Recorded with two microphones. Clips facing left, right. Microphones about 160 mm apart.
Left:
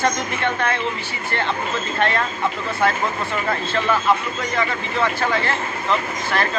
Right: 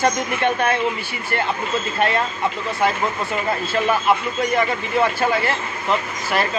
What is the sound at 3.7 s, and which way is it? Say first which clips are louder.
Speech: right 1 dB; 15° right (ahead or behind).